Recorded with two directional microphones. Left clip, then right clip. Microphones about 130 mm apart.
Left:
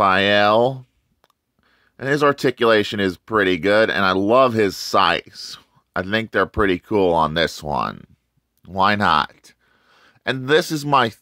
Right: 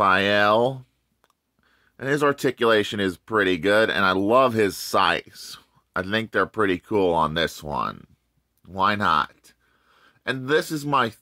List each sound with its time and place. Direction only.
0.0 s speech: 25° left (ahead or behind); by 11.1 s 45° left (ahead or behind)